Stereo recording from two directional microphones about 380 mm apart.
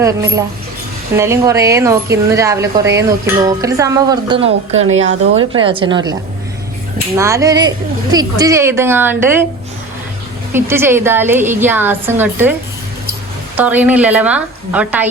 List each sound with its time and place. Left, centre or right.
0.0 s speech: centre
4.7 s a woman's voice: right
4.9 s speech: centre
7.2 s speech: centre
10.5 s a woman's voice: centre
13.6 s a woman's voice: centre